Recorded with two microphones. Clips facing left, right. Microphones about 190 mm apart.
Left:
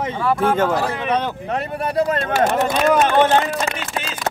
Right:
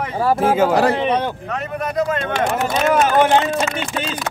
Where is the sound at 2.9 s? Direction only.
10° right (ahead or behind).